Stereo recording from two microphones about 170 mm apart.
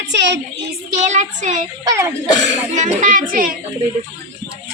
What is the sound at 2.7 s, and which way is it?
Speech, 45° right (ahead or behind).